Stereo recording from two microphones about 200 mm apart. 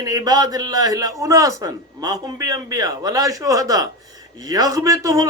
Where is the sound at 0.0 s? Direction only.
20° right (ahead or behind).